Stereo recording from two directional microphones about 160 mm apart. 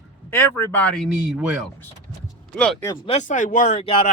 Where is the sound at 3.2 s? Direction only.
55° left (ahead or behind).